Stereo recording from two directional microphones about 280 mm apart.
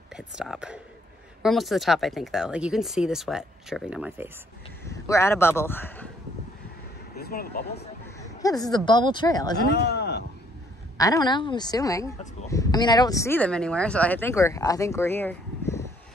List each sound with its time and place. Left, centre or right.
0.1 s speech: centre
4.8 s speech: centre
7.2 s speech: left
8.2 s speech: centre
9.8 s a sound: left
11.0 s speech: centre